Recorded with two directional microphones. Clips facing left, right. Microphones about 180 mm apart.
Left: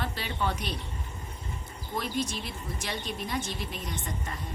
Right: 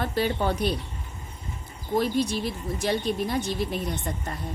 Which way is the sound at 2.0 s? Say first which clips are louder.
Right 8 dB; 40° right (ahead or behind).